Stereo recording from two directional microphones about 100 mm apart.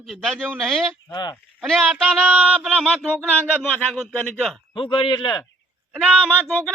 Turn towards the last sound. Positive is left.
turn(degrees=15)  # may be behind; listen again after turning